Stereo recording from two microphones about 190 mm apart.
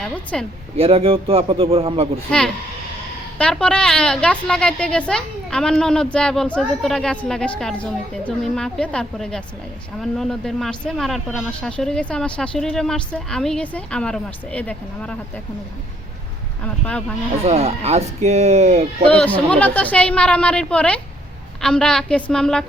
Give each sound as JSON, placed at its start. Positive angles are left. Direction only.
{"t": 0.0, "sound": "speech", "side_deg": 5}
{"t": 0.8, "sound": "speech", "side_deg": -30}
{"t": 3.3, "sound": "speech", "side_deg": 5}
{"t": 16.6, "sound": "a woman's voice", "side_deg": 5}
{"t": 17.4, "sound": "speech", "side_deg": -35}
{"t": 19.0, "sound": "a woman's voice", "side_deg": 5}